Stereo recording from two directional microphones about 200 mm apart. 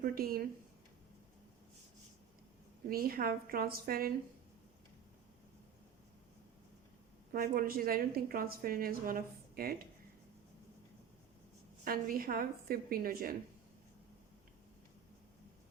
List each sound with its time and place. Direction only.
0.0 s a woman's voice: 45° right (ahead or behind)
2.9 s a woman's voice: 50° right (ahead or behind)
7.3 s a woman's voice: 45° right (ahead or behind)
11.9 s a woman's voice: 45° right (ahead or behind)